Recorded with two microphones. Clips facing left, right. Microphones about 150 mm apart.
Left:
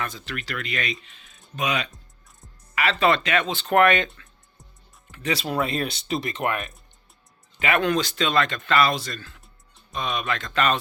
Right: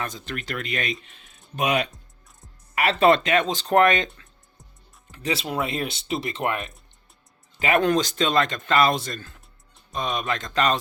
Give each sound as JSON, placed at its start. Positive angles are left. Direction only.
{"t": 0.0, "sound": "speech", "side_deg": -45}
{"t": 5.1, "sound": "speech", "side_deg": -30}
{"t": 7.6, "sound": "speech", "side_deg": -40}